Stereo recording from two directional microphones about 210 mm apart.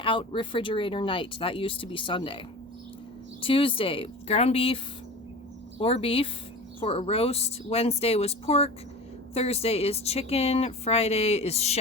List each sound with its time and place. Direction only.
0.0 s speech: 25° left (ahead or behind)
3.4 s speech: 25° left (ahead or behind)
5.8 s speech: 25° left (ahead or behind)